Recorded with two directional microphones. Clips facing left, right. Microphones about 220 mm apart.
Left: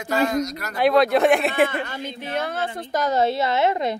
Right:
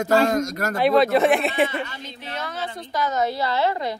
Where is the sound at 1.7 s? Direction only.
50° left (ahead or behind).